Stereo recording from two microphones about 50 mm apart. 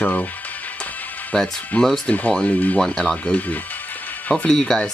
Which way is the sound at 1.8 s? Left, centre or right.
Centre.